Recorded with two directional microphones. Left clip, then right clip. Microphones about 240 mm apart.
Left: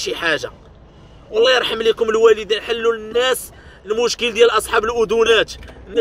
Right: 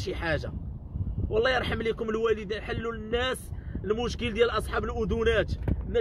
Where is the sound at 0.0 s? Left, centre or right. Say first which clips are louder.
Left 11 dB; centre.